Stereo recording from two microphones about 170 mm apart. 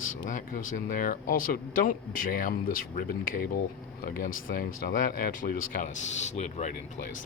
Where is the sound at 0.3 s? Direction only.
50° left (ahead or behind).